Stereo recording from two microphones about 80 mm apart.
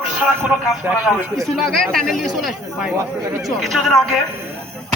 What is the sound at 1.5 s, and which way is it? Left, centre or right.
A man's voice, centre.